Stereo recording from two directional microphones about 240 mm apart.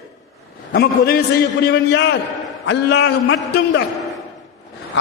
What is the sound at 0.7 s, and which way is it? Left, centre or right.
A man's voice, left.